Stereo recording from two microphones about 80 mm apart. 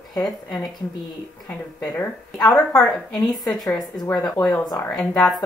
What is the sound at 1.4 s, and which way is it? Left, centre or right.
A woman's voice, left.